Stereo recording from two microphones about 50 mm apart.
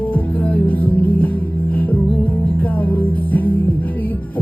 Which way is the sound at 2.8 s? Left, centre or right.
Left.